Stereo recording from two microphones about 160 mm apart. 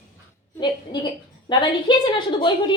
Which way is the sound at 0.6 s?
30° left (ahead or behind).